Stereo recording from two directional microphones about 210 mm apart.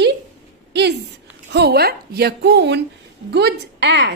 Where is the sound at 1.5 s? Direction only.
50° right (ahead or behind).